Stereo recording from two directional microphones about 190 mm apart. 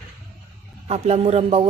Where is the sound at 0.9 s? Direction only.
35° right (ahead or behind).